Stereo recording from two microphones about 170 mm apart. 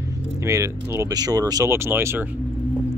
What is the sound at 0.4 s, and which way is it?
Speech, 15° right (ahead or behind).